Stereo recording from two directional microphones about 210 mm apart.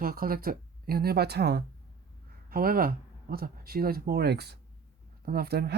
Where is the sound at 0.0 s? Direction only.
45° right (ahead or behind).